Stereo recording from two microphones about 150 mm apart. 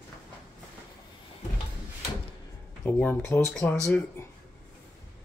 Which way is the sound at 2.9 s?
15° left (ahead or behind).